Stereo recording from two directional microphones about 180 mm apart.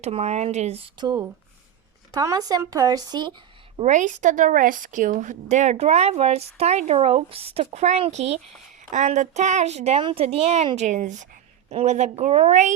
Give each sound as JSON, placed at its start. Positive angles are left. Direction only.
{"t": 0.0, "sound": "a woman's voice", "side_deg": -35}
{"t": 3.8, "sound": "a woman's voice", "side_deg": -40}